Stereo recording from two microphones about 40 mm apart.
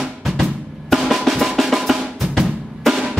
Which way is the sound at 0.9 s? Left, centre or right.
Centre.